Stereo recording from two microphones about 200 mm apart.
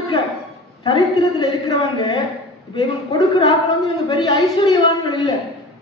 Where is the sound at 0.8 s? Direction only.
20° left (ahead or behind).